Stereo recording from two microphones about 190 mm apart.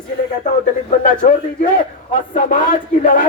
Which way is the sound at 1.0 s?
45° left (ahead or behind).